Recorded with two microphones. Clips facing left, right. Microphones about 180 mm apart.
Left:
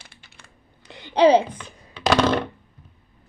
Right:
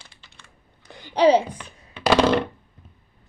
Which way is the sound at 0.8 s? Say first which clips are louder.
Left 2 dB; 20° left (ahead or behind).